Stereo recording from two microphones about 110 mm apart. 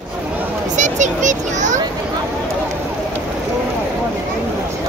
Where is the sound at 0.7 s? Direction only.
90° right.